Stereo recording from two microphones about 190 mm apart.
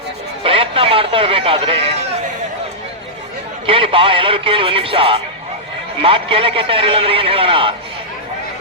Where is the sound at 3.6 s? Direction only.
30° right (ahead or behind).